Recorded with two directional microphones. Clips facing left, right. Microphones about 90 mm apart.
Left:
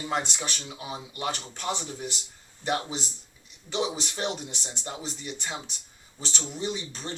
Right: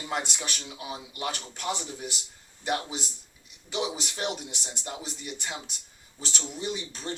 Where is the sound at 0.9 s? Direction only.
30° left (ahead or behind).